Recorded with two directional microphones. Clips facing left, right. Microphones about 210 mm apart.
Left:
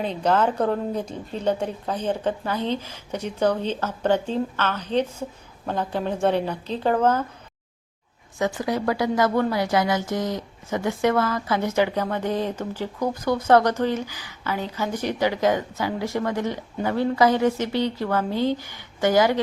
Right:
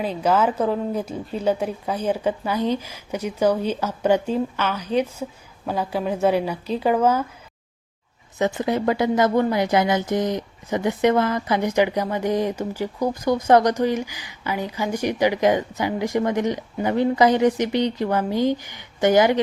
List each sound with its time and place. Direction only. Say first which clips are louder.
0.0 s a woman's voice: right 1 dB; 5° right (ahead or behind)
8.4 s a woman's voice: right 3 dB; 20° right (ahead or behind)